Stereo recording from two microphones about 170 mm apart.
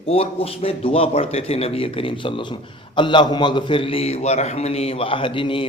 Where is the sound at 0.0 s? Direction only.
35° left (ahead or behind).